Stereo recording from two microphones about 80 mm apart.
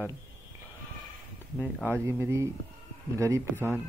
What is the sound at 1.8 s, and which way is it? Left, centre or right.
Speech, right.